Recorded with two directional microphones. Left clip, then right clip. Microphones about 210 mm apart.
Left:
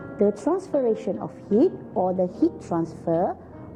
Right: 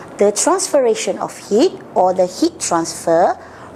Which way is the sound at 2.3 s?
5° right (ahead or behind).